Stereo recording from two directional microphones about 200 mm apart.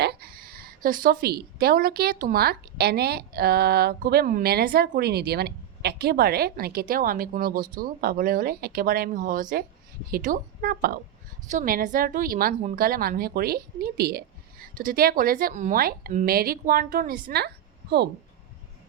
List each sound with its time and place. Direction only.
0.0 s a woman's voice: 50° right (ahead or behind)